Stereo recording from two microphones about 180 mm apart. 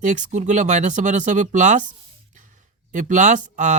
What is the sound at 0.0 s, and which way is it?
Speech, 45° right (ahead or behind).